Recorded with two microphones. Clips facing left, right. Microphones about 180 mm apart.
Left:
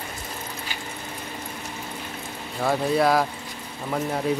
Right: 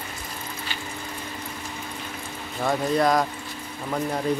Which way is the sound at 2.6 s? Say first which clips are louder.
Left 1 dB; 5° left (ahead or behind).